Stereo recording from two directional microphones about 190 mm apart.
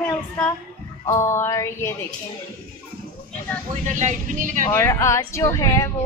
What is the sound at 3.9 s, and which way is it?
Speech, 40° right (ahead or behind).